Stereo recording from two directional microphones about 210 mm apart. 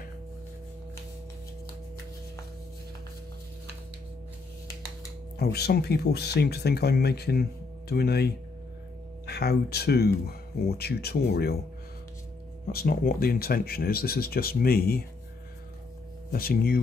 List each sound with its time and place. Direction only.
5.4 s speech: 50° left (ahead or behind)
12.7 s speech: 45° left (ahead or behind)
16.3 s speech: 45° left (ahead or behind)